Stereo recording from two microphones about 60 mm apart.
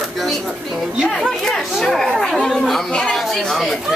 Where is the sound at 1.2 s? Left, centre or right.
Centre.